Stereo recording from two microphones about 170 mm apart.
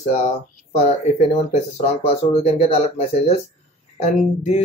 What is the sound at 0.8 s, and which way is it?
Speech, 40° left (ahead or behind).